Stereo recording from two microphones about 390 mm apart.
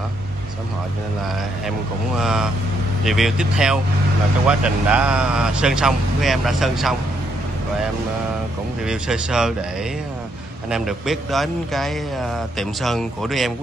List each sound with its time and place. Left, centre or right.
2.1 s a man's voice: centre
8.8 s a man's voice: centre
10.7 s a man's voice: centre